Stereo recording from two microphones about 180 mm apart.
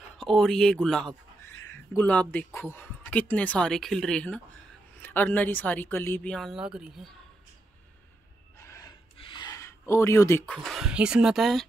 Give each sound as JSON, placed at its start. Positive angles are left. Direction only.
{"t": 0.2, "sound": "speech", "side_deg": 0}
{"t": 8.5, "sound": "gasp", "side_deg": 15}
{"t": 9.1, "sound": "a sound", "side_deg": 25}
{"t": 10.5, "sound": "speech", "side_deg": 0}